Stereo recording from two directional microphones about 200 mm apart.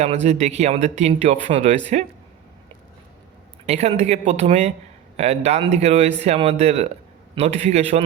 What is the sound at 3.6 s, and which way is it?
A man's voice, 35° right (ahead or behind).